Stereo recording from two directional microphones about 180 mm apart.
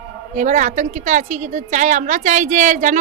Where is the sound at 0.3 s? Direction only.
45° right (ahead or behind).